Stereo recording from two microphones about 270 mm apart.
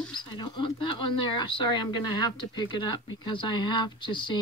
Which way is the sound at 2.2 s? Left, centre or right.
Centre.